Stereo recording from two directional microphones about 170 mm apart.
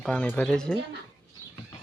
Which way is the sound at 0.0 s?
5° left (ahead or behind).